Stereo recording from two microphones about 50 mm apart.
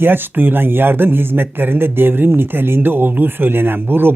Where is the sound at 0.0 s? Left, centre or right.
Right.